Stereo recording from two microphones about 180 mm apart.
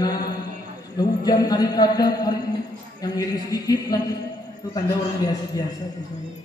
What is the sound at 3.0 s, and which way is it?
A man's voice, 20° left (ahead or behind).